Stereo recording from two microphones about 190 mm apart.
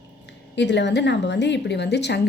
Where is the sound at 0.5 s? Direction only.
65° left (ahead or behind).